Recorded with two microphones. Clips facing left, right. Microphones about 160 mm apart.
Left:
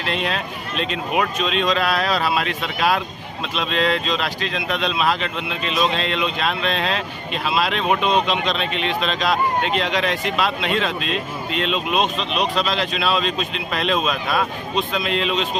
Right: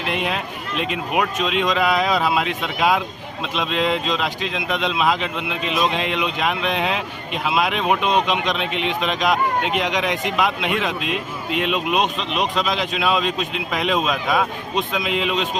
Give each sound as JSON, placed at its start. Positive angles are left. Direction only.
{"t": 0.1, "sound": "speech", "side_deg": -15}